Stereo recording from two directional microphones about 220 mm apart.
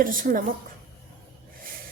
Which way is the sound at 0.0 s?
40° right (ahead or behind).